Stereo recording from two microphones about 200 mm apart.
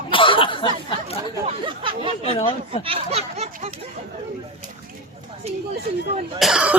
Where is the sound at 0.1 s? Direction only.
25° left (ahead or behind).